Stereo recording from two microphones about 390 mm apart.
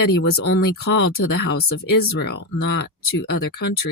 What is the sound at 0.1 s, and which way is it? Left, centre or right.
Speech, left.